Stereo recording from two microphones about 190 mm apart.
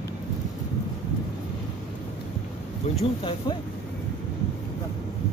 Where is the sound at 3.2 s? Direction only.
25° left (ahead or behind).